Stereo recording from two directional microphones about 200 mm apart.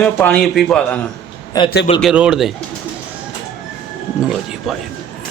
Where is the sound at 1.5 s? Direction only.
20° left (ahead or behind).